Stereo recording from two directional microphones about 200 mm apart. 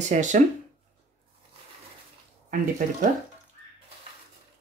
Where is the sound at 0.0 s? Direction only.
35° right (ahead or behind).